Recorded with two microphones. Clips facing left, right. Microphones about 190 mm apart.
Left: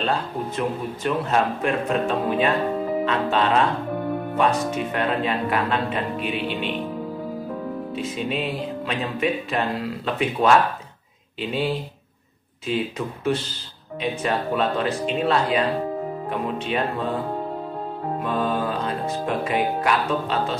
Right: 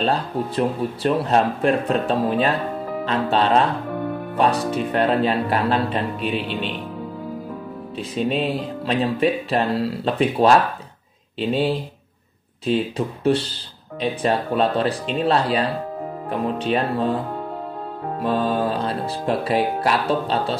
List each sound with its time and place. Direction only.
0.0 s music: 35° right (ahead or behind)
8.0 s music: 35° right (ahead or behind)
18.2 s music: 35° right (ahead or behind)